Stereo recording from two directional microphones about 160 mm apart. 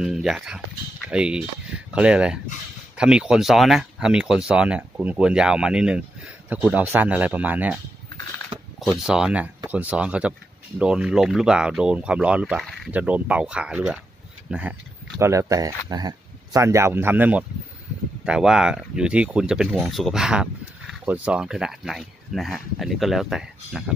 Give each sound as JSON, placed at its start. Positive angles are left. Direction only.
{"t": 0.0, "sound": "speech", "side_deg": -5}
{"t": 8.9, "sound": "speech", "side_deg": -5}